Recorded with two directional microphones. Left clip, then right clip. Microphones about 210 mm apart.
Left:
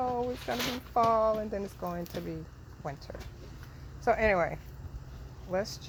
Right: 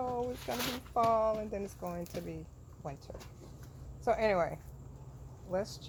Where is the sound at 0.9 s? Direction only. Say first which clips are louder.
Left 3 dB; 20° left (ahead or behind).